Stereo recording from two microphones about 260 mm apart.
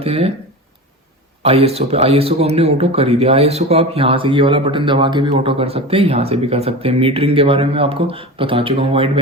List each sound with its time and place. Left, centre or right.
0.0 s speech: right
1.4 s speech: right